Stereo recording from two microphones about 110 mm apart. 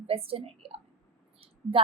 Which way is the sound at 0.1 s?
60° right (ahead or behind).